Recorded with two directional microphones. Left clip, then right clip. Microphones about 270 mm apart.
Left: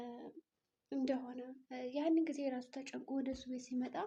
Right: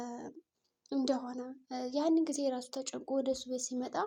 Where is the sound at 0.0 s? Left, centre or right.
Right.